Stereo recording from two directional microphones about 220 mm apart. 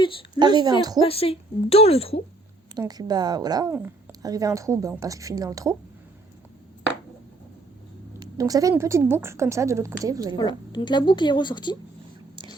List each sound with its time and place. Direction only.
0.0 s speech: 25° left (ahead or behind)
0.3 s a woman's voice: 20° right (ahead or behind)
1.0 s a woman's voice: 25° left (ahead or behind)
2.7 s a woman's voice: 20° right (ahead or behind)
8.2 s a woman's voice: 15° right (ahead or behind)
10.3 s a woman's voice: 20° left (ahead or behind)